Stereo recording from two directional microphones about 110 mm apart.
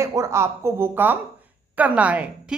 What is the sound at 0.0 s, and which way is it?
A woman's voice, 30° right (ahead or behind).